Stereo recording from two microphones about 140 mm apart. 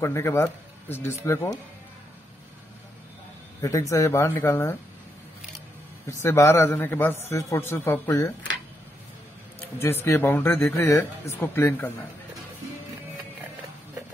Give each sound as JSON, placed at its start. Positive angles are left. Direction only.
{"t": 0.0, "sound": "speech", "side_deg": 20}
{"t": 3.9, "sound": "speech", "side_deg": 20}
{"t": 6.0, "sound": "speech", "side_deg": 20}
{"t": 9.8, "sound": "speech", "side_deg": 15}